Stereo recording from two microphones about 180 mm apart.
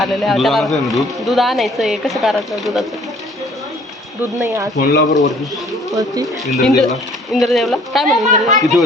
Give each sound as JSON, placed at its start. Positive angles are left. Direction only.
{"t": 0.0, "sound": "speech", "side_deg": 0}
{"t": 4.4, "sound": "speech", "side_deg": -15}
{"t": 4.8, "sound": "speech", "side_deg": 60}
{"t": 5.9, "sound": "speech", "side_deg": -20}
{"t": 6.5, "sound": "speech", "side_deg": 0}